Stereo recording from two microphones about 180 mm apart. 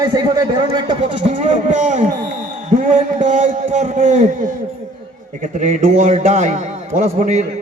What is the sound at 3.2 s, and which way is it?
A man's voice, 45° right (ahead or behind).